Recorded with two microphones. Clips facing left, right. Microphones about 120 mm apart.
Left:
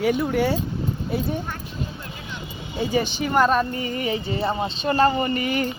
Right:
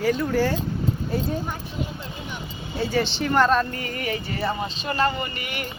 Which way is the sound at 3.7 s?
20° left (ahead or behind).